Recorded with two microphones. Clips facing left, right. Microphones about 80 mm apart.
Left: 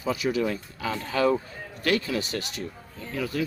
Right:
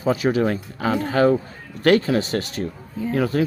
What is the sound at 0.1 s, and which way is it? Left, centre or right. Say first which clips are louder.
Speech: right 6 dB; right.